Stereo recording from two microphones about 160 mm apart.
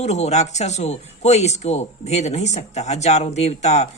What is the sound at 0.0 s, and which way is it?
Speech, 45° left (ahead or behind).